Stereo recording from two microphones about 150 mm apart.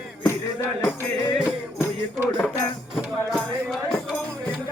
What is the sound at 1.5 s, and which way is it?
Music, 15° left (ahead or behind).